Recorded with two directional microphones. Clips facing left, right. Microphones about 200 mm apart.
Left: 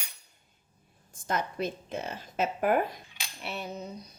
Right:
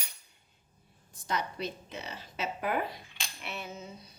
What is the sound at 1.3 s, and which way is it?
Speech, 50° left (ahead or behind).